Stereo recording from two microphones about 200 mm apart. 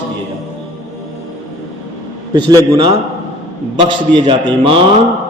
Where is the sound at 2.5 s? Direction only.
20° right (ahead or behind).